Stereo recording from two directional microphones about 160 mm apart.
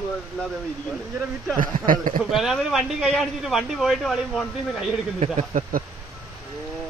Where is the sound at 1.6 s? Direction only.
55° right (ahead or behind).